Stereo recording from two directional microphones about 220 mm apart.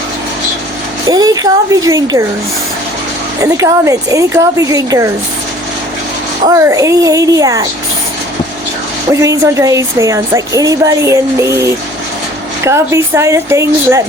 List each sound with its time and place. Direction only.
1.0 s speech: 15° right (ahead or behind)
3.4 s speech: 15° right (ahead or behind)
6.5 s speech: 15° right (ahead or behind)
9.2 s speech: 15° right (ahead or behind)